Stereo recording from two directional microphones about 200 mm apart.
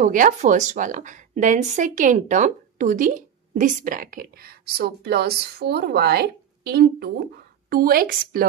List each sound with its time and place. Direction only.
0.0 s a woman's voice: 40° right (ahead or behind)